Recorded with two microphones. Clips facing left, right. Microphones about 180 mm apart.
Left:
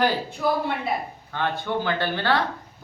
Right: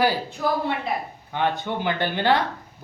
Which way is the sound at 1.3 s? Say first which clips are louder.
Right 1 dB; 15° right (ahead or behind).